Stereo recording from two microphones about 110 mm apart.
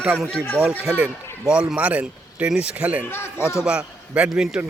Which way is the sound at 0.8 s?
5° right (ahead or behind).